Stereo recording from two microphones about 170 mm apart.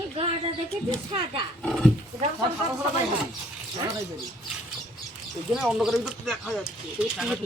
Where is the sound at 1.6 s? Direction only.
Centre (ahead or behind).